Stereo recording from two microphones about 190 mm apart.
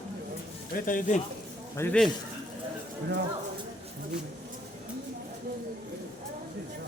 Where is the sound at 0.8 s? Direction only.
45° left (ahead or behind).